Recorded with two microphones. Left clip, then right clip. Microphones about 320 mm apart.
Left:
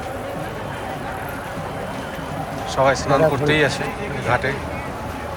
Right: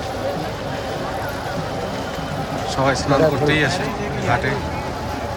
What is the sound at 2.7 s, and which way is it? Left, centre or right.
Speech, centre.